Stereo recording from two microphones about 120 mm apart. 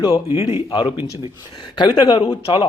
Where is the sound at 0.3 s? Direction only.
55° left (ahead or behind).